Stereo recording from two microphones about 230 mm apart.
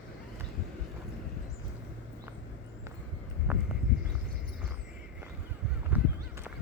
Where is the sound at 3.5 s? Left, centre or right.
Centre.